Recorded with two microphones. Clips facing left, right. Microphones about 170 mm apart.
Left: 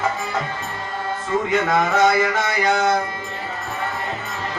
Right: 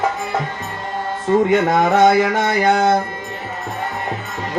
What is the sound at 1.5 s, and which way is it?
Music, 55° right (ahead or behind).